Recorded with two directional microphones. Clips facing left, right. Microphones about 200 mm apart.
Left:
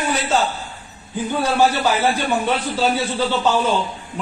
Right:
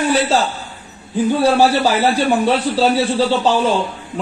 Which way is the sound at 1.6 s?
35° right (ahead or behind).